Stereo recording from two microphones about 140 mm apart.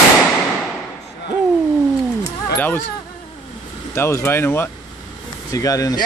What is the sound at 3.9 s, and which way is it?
Speech, 15° left (ahead or behind).